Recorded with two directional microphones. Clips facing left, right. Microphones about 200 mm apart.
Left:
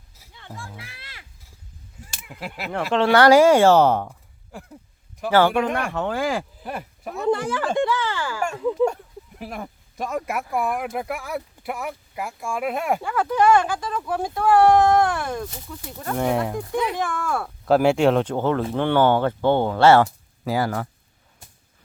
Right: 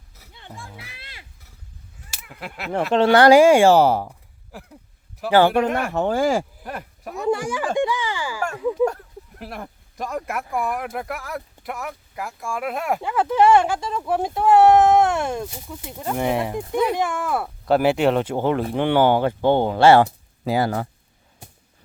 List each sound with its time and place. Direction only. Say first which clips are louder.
0.3 s music: left 1 dB; 20° right (ahead or behind)
0.8 s a sound: even; 20° right (ahead or behind)
2.0 s a sound: left 1 dB; centre (ahead or behind)
3.0 s speech: right 2 dB; 20° right (ahead or behind); by 5.9 s 5° right (ahead or behind)
5.9 s speech: right 4 dB; 40° right (ahead or behind)
6.7 s speech: left 1 dB; centre (ahead or behind)
7.3 s speech: even; 10° right (ahead or behind)
13.0 s speech: right 6 dB; 25° right (ahead or behind)
15.4 s speech: right 1 dB; 10° right (ahead or behind)
16.1 s speech: even; 5° right (ahead or behind)
16.9 s speech: right 3 dB; 20° right (ahead or behind)
17.7 s speech: left 1 dB; centre (ahead or behind); by 20.8 s 20° right (ahead or behind)